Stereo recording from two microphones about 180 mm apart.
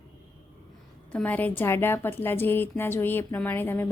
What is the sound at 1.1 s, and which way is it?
Speech, 10° left (ahead or behind).